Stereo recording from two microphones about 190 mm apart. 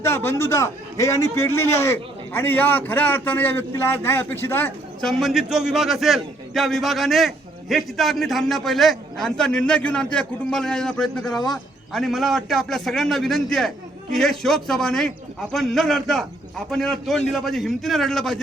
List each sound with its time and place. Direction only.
0.0 s a man's voice: 15° left (ahead or behind)